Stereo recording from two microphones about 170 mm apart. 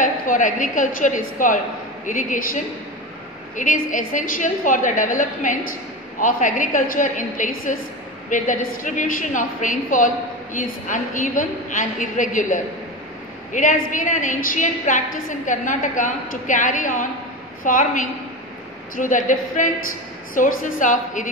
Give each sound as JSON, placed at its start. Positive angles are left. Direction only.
{"t": 0.0, "sound": "a woman's voice", "side_deg": 50}